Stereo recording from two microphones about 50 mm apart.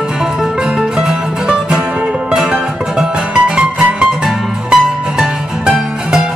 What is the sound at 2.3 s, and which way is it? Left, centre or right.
Music, centre.